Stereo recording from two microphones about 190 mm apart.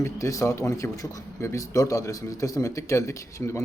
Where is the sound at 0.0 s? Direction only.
15° left (ahead or behind).